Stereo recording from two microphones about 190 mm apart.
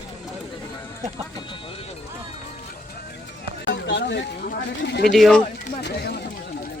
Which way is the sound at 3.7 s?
65° left (ahead or behind).